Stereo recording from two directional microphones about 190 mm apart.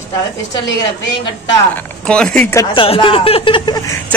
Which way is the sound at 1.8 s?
5° left (ahead or behind).